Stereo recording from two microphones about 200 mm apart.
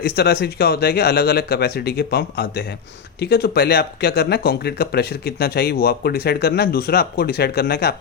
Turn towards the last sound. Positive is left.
turn(degrees=55)  # may be behind; listen again after turning